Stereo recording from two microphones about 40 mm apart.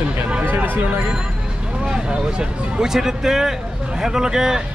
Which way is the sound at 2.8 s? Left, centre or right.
Centre.